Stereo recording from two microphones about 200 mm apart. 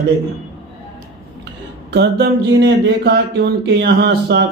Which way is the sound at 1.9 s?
55° right (ahead or behind).